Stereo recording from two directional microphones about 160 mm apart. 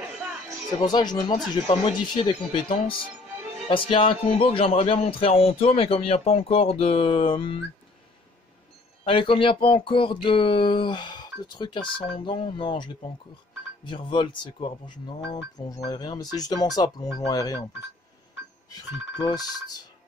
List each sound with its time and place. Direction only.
0.2 s music: centre (ahead or behind)
0.8 s speech: 25° left (ahead or behind)
9.0 s speech: 35° left (ahead or behind)
19.2 s speech: 25° left (ahead or behind)